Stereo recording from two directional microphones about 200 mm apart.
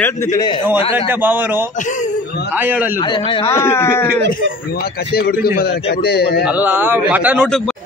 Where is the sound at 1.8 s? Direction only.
40° left (ahead or behind).